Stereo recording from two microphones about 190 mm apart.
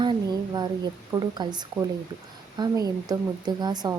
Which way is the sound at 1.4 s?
20° right (ahead or behind).